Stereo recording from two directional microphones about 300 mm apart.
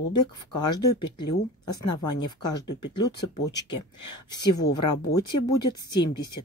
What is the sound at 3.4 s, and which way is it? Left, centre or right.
Speech, centre.